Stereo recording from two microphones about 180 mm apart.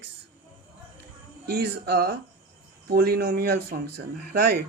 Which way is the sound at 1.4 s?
60° right (ahead or behind).